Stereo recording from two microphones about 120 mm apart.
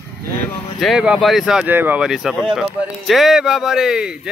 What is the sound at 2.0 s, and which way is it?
A man's voice, 5° right (ahead or behind).